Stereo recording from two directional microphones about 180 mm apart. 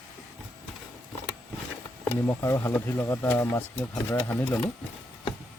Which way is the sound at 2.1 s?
10° left (ahead or behind).